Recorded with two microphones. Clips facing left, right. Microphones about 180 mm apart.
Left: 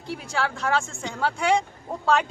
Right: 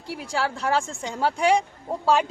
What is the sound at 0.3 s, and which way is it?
Speech, 35° right (ahead or behind).